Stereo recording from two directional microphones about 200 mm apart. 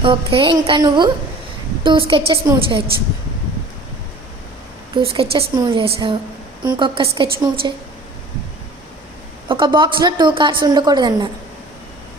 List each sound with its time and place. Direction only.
0.0 s a woman's voice: 25° right (ahead or behind)
4.9 s a woman's voice: 25° right (ahead or behind)
9.5 s a woman's voice: 25° right (ahead or behind)